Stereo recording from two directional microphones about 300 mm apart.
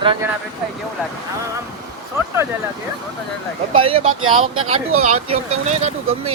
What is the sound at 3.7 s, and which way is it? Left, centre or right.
Speech, centre.